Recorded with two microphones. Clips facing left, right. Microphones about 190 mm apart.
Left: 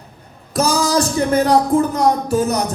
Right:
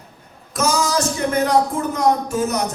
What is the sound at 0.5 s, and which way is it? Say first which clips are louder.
Speech: left 3 dB; 35° left (ahead or behind).